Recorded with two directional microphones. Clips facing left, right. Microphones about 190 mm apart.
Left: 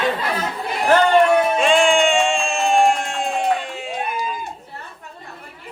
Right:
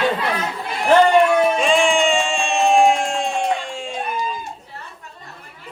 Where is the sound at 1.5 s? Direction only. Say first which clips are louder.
Left 1 dB; centre (ahead or behind).